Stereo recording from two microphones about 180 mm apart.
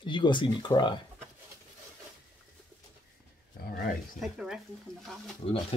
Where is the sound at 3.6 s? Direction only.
60° left (ahead or behind).